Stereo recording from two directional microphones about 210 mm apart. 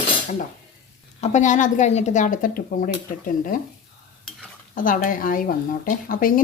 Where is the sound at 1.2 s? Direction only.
35° left (ahead or behind).